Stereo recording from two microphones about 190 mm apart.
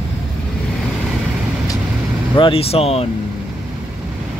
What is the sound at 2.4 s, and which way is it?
Speech, 30° left (ahead or behind).